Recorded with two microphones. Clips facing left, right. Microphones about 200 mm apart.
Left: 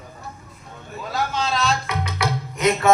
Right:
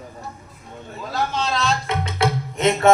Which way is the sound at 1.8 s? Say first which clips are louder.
Right 3 dB; 25° right (ahead or behind).